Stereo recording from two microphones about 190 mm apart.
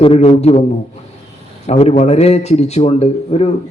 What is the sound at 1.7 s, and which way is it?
A man's voice, 35° left (ahead or behind).